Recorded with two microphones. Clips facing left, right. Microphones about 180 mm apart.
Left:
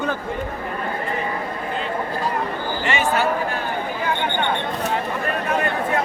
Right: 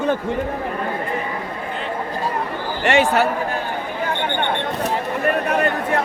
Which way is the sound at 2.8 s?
75° right (ahead or behind).